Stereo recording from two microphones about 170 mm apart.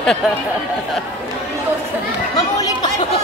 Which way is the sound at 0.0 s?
5° left (ahead or behind).